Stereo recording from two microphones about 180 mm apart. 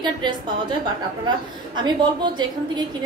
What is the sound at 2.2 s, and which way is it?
Speech, 25° right (ahead or behind).